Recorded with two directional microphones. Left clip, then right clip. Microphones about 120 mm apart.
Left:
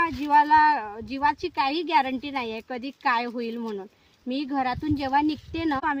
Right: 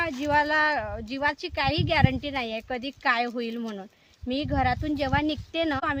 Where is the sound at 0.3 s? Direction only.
20° right (ahead or behind).